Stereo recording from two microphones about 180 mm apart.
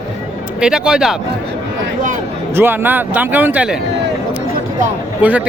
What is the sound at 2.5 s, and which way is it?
A man's voice, 10° right (ahead or behind).